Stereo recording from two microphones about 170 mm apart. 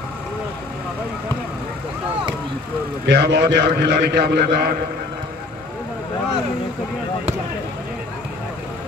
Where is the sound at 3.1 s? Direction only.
85° right.